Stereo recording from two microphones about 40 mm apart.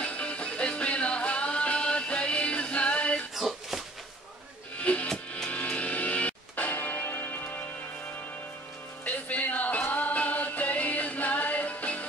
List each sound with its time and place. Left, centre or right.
0.0 s music: left
3.3 s a sound: centre
4.7 s music: left
5.5 s vehicle: left
6.5 s church bell: left
9.0 s music: left